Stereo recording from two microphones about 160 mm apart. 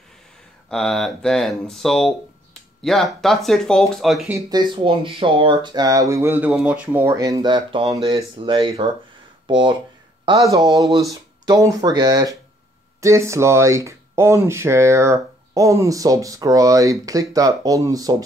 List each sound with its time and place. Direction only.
0.7 s speech: 5° left (ahead or behind)
4.5 s speech: 30° right (ahead or behind)
11.4 s speech: 20° right (ahead or behind)